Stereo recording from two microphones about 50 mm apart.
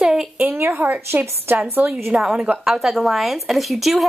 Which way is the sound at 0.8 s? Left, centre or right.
Right.